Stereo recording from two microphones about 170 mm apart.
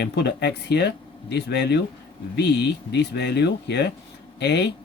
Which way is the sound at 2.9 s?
85° left.